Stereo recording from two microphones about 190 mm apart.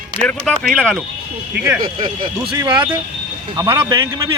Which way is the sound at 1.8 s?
30° right (ahead or behind).